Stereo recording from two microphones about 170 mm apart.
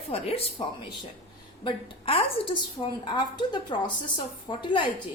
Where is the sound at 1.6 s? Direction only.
35° left (ahead or behind).